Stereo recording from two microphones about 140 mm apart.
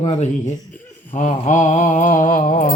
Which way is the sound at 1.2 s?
65° left (ahead or behind).